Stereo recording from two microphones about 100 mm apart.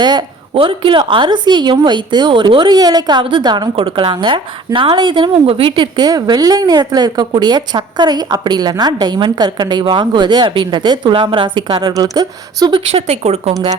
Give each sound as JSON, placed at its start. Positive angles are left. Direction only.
{"t": 0.0, "sound": "a woman's voice", "side_deg": -45}
{"t": 3.8, "sound": "a woman's voice", "side_deg": -60}
{"t": 6.1, "sound": "a woman's voice", "side_deg": -40}
{"t": 11.1, "sound": "a woman's voice", "side_deg": -60}
{"t": 11.9, "sound": "speech", "side_deg": -40}
{"t": 12.7, "sound": "speech", "side_deg": -90}